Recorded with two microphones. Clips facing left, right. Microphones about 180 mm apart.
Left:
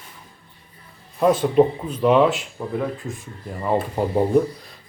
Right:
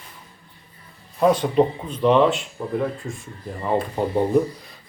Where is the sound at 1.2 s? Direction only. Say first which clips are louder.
Left 1 dB; 5° left (ahead or behind).